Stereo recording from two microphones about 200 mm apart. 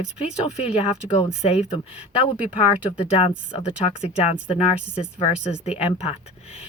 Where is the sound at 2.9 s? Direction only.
30° left (ahead or behind).